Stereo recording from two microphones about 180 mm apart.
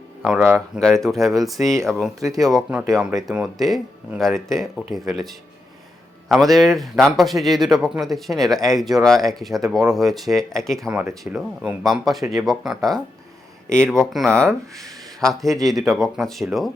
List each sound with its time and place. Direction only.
0.2 s speech: 5° right (ahead or behind)
0.8 s speech: centre (ahead or behind)
2.3 s speech: 20° right (ahead or behind)
2.6 s speech: 5° right (ahead or behind)
10.8 s speech: 15° right (ahead or behind)
11.2 s speech: centre (ahead or behind)